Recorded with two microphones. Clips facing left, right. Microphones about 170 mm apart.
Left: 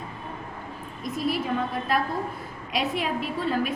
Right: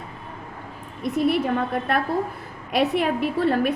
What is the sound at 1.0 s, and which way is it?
Speech, 65° right (ahead or behind).